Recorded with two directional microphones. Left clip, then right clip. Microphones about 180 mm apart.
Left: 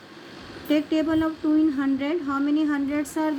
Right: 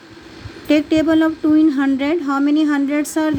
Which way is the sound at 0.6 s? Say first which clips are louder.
Right 8 dB; 55° right (ahead or behind).